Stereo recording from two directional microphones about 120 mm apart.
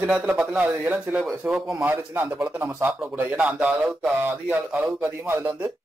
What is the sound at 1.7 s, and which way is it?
Speech, 20° right (ahead or behind).